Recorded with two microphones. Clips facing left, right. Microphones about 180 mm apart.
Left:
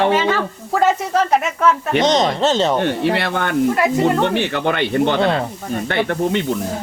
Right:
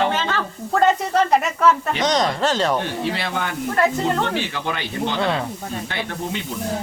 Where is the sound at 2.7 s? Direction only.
65° left (ahead or behind).